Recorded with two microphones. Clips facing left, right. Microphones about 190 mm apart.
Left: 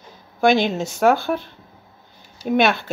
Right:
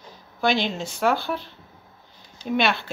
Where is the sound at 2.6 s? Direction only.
50° left (ahead or behind).